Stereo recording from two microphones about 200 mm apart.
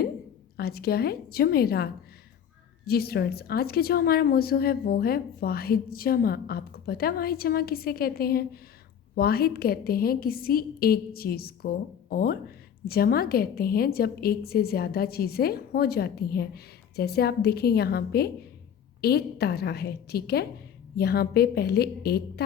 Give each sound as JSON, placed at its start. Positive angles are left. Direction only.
{"t": 0.5, "sound": "a woman's voice", "side_deg": 50}